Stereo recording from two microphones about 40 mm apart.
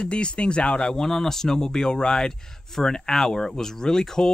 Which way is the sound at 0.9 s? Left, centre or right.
Centre.